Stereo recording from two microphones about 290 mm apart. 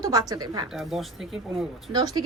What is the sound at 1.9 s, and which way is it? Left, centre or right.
Speech, centre.